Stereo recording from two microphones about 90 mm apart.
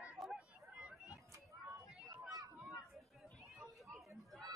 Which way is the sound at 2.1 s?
40° right (ahead or behind).